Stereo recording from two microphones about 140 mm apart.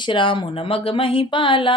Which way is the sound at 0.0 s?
35° left (ahead or behind).